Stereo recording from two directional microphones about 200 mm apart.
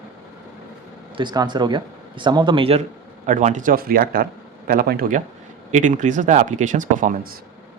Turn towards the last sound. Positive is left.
turn(degrees=-40)  # may be behind; listen again after turning